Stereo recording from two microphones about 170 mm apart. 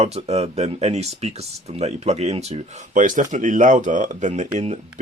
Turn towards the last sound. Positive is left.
turn(degrees=-40)  # may be behind; listen again after turning